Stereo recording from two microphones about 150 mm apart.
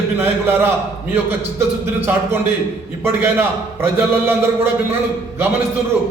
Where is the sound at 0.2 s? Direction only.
15° right (ahead or behind).